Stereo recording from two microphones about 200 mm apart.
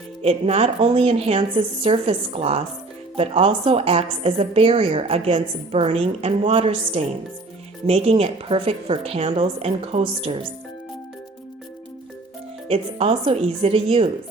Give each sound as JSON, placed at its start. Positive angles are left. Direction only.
{"t": 0.2, "sound": "a woman's voice", "side_deg": -30}
{"t": 12.6, "sound": "a woman's voice", "side_deg": -30}